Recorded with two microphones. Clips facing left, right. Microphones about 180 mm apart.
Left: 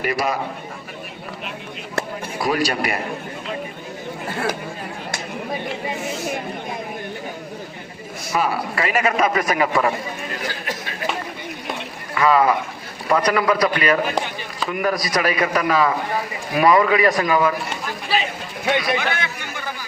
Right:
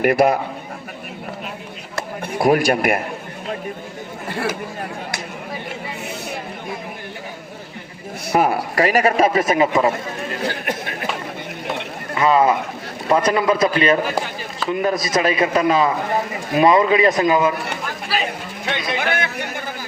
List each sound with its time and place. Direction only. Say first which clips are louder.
0.0 s speech: right 7 dB; 60° right (ahead or behind)
2.2 s a man's voice: right 7 dB; 55° right (ahead or behind)
8.3 s a man's voice: right 4 dB; 55° right (ahead or behind); by 9.9 s 20° right (ahead or behind)
10.4 s speech: right 4 dB; 60° right (ahead or behind)
12.1 s a man's voice: right 1 dB; 25° right (ahead or behind)
18.9 s chatter: right 2 dB; 50° right (ahead or behind)